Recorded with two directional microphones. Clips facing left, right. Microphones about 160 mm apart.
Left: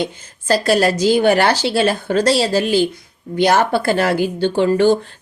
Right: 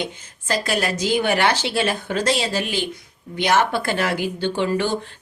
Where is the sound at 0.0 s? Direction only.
35° left (ahead or behind).